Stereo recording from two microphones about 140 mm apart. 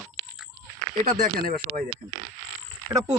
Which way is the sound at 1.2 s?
75° right (ahead or behind).